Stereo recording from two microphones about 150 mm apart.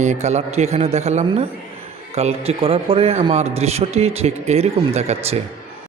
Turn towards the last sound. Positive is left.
turn(degrees=-45)  # may be behind; listen again after turning